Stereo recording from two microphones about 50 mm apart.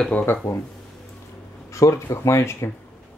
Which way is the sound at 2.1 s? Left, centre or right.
Left.